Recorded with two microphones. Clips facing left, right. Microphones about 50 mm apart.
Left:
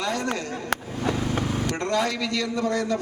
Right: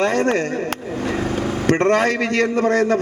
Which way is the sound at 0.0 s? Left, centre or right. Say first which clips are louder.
Right 9 dB; right.